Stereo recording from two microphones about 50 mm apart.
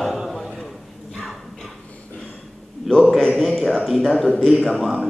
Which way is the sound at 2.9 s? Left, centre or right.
Centre.